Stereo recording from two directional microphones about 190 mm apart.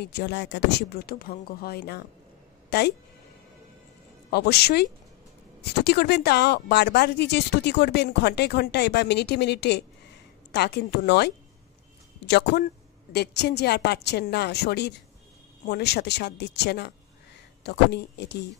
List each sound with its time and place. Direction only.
0.0 s speech: 60° left (ahead or behind)
4.3 s speech: 60° left (ahead or behind)